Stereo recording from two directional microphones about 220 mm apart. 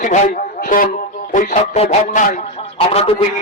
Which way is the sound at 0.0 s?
35° left (ahead or behind).